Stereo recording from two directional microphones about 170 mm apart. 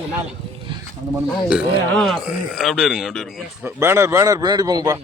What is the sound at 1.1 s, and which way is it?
Speech, 5° right (ahead or behind).